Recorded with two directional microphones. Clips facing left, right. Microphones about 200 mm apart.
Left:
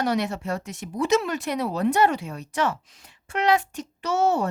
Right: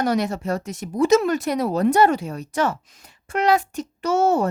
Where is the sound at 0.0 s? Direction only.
40° right (ahead or behind).